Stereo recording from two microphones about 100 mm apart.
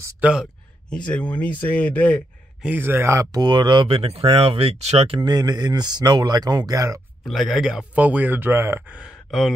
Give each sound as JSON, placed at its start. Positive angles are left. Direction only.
{"t": 0.2, "sound": "speech", "side_deg": -10}
{"t": 0.8, "sound": "speech", "side_deg": 10}
{"t": 2.6, "sound": "speech", "side_deg": -20}
{"t": 5.2, "sound": "speech", "side_deg": -40}
{"t": 7.2, "sound": "speech", "side_deg": 0}
{"t": 8.9, "sound": "speech", "side_deg": -10}